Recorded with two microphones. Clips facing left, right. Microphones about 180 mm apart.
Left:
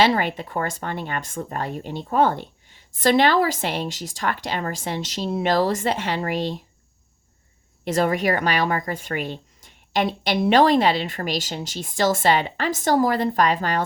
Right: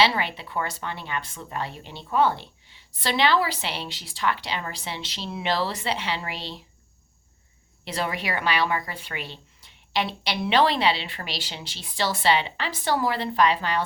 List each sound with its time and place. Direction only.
0.0 s speech: 45° left (ahead or behind)
7.9 s speech: 45° left (ahead or behind)